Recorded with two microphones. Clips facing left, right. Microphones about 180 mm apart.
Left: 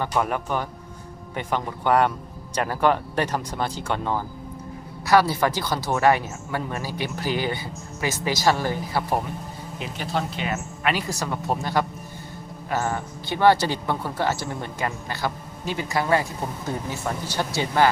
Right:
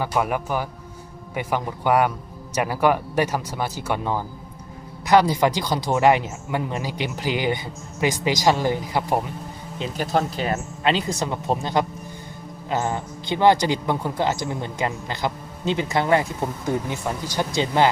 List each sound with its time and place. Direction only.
0.0 s speech: 10° right (ahead or behind)
10.0 s speech: 45° right (ahead or behind)
10.9 s speech: 20° right (ahead or behind)